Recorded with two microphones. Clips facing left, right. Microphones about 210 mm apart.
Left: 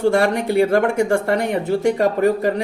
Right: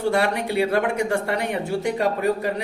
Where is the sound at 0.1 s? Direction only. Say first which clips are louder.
Left 5 dB; 45° left (ahead or behind).